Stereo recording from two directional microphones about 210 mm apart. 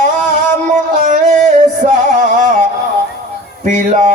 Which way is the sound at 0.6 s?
35° right (ahead or behind).